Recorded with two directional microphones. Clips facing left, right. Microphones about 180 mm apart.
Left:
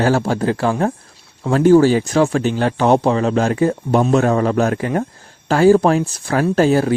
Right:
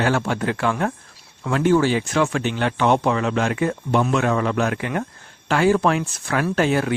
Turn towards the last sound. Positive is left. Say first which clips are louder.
# left 6 dB
turn(degrees=35)  # may be behind; listen again after turning